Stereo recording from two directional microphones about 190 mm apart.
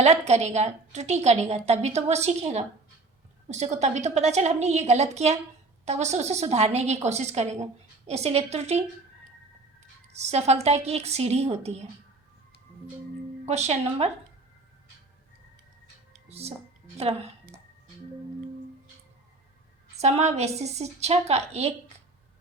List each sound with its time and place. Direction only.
0.0 s a woman's voice: 35° right (ahead or behind)
10.1 s a woman's voice: 35° right (ahead or behind)
13.4 s a woman's voice: 35° right (ahead or behind)
16.3 s a woman's voice: 35° right (ahead or behind)
20.0 s a woman's voice: 35° right (ahead or behind)